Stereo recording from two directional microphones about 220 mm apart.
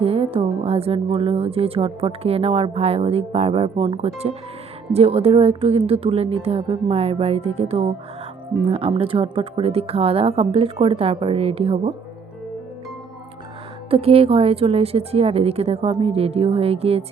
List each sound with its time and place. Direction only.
0.0 s speech: 25° right (ahead or behind)
13.9 s speech: 25° right (ahead or behind)